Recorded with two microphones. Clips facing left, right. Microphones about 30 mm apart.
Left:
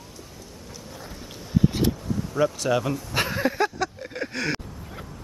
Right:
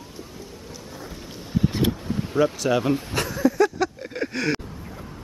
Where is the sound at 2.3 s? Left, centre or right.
Right.